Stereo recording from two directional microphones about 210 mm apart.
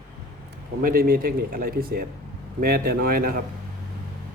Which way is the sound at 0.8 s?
45° right (ahead or behind).